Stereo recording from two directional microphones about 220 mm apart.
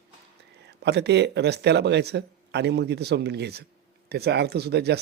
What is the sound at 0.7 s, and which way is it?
Speech, 50° right (ahead or behind).